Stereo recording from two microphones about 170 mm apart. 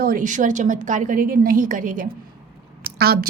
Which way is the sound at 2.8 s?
65° right (ahead or behind).